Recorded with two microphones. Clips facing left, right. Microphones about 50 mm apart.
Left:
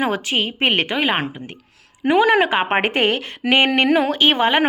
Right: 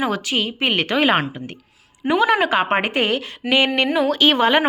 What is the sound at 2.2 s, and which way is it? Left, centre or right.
Speech, left.